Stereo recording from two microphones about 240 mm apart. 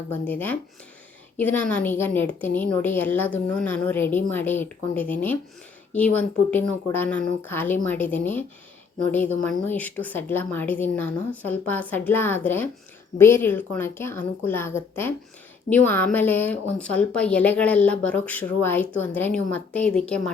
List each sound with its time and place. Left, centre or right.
0.1 s a woman's voice: centre